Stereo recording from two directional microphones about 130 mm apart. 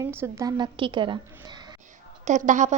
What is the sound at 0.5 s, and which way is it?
A woman's voice, 35° right (ahead or behind).